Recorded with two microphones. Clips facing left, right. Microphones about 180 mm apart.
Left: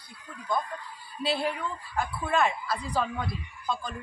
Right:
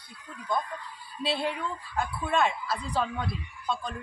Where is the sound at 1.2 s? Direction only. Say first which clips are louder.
Left 1 dB; centre (ahead or behind).